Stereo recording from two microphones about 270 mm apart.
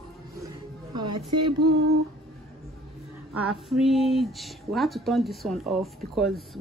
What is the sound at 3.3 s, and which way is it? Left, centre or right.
Speech, centre.